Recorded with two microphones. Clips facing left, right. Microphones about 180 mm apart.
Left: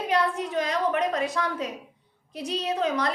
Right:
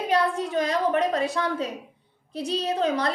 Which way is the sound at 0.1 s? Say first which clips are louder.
Right 2 dB; 30° right (ahead or behind).